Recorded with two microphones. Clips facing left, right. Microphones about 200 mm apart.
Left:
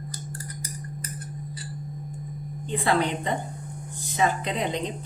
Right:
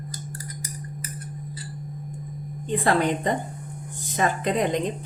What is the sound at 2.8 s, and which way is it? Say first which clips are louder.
A woman's voice: right 2 dB; 45° right (ahead or behind).